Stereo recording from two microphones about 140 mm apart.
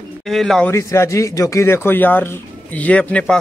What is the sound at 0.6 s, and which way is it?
Speech, 20° left (ahead or behind).